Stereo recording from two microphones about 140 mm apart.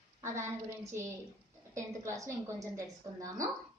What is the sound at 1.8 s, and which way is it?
Speech, 20° right (ahead or behind).